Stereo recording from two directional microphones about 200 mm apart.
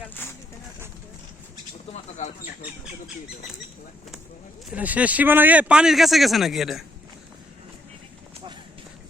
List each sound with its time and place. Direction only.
0.1 s a sound: 10° left (ahead or behind)
1.9 s bird: 35° left (ahead or behind)
4.7 s speech: 5° right (ahead or behind)